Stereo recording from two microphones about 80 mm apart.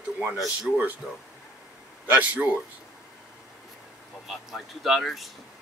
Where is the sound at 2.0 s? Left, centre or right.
Right.